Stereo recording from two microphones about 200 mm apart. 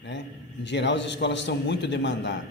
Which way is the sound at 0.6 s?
60° left (ahead or behind).